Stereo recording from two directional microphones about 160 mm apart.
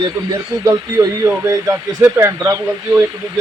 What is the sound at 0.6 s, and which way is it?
Speech, 20° right (ahead or behind).